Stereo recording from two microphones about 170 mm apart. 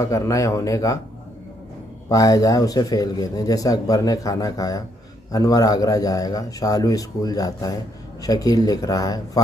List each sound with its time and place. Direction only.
0.0 s speech: 20° left (ahead or behind)
2.0 s speech: 20° left (ahead or behind)